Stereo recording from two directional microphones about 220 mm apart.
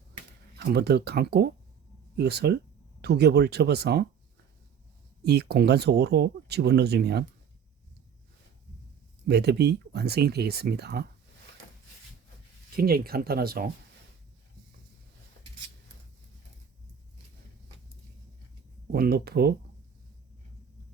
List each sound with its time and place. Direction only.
0.6 s speech: 50° right (ahead or behind)
5.2 s speech: 50° right (ahead or behind)
9.2 s speech: 50° right (ahead or behind)
12.7 s speech: 45° right (ahead or behind)
18.9 s speech: 45° right (ahead or behind)